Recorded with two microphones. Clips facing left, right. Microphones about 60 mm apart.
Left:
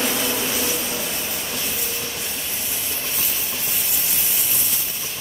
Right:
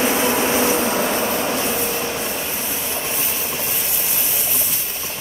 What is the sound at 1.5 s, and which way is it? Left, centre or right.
Train, right.